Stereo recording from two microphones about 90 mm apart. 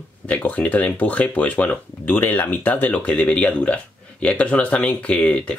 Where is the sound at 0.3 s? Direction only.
15° left (ahead or behind).